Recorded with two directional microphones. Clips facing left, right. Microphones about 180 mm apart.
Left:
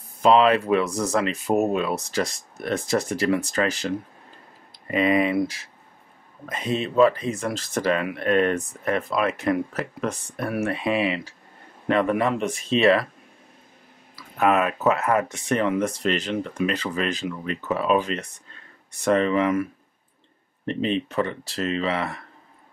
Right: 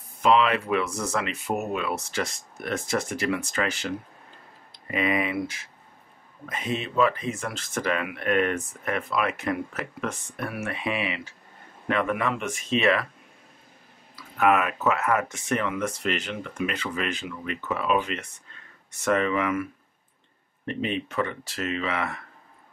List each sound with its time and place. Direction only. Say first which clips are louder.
0.2 s speech: left 4 dB; 35° left (ahead or behind)
4.9 s speech: left 6 dB; 35° left (ahead or behind)
14.1 s speech: left 1 dB; 35° left (ahead or behind)